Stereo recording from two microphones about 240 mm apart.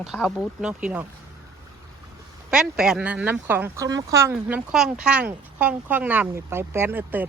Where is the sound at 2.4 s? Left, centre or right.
Centre.